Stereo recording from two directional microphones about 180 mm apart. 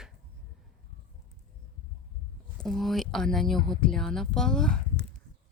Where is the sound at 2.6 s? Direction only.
Centre (ahead or behind).